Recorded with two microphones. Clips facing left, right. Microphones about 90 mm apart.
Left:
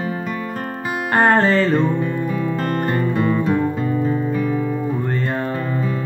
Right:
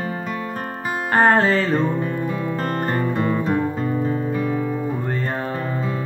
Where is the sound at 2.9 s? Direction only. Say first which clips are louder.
Left 2 dB; 35° right (ahead or behind).